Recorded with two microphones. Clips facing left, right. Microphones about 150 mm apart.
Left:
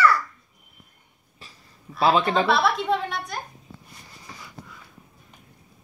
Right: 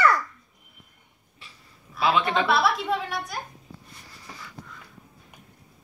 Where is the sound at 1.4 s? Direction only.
40° left (ahead or behind).